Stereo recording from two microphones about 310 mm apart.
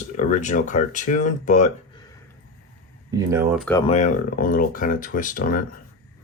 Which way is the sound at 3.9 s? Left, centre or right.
Left.